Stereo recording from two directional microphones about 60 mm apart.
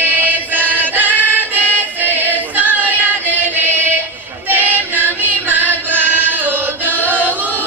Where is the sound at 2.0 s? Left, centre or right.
Right.